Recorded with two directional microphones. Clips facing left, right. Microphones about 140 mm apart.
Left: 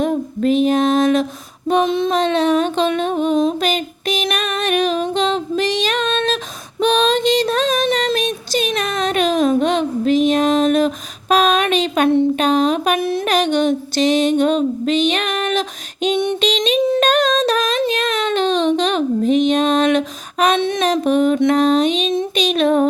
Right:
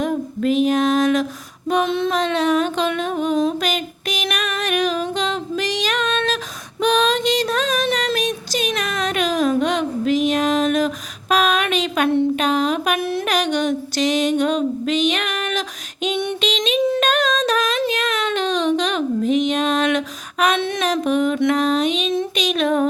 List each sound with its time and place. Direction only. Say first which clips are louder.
0.0 s female singing: left 3 dB; 30° left (ahead or behind)
2.1 s a sound: left 3 dB; 30° left (ahead or behind)
13.0 s music: left 3 dB; 20° left (ahead or behind)